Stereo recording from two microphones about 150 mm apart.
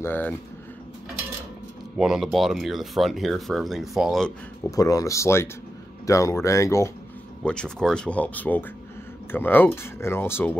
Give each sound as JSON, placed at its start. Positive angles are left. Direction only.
{"t": 0.0, "sound": "speech", "side_deg": 15}
{"t": 2.0, "sound": "speech", "side_deg": -5}
{"t": 4.6, "sound": "speech", "side_deg": 25}
{"t": 7.4, "sound": "speech", "side_deg": 5}